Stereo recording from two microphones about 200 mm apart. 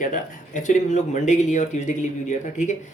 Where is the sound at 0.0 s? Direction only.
40° left (ahead or behind).